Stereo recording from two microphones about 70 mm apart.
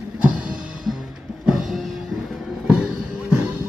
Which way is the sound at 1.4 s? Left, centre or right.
Centre.